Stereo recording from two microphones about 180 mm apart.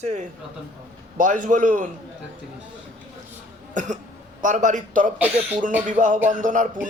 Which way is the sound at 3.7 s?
45° right (ahead or behind).